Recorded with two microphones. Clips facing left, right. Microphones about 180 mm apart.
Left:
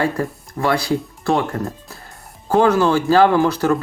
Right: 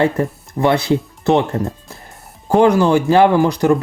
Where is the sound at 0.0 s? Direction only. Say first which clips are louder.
Right 4 dB; 20° right (ahead or behind).